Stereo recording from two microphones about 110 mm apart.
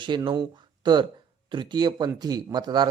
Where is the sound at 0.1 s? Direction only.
40° right (ahead or behind).